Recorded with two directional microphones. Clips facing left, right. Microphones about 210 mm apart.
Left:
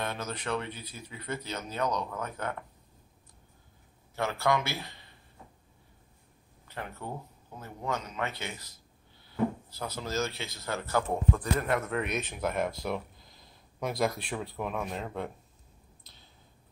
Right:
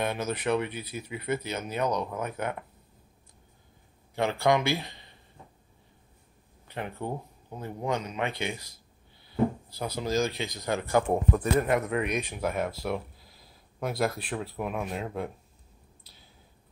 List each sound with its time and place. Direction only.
0.0 s speech: 10° right (ahead or behind)
4.1 s speech: 15° right (ahead or behind)
6.7 s speech: 20° right (ahead or behind); by 15.3 s 5° right (ahead or behind)